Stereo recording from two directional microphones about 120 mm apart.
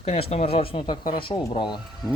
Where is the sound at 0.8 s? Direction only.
35° left (ahead or behind).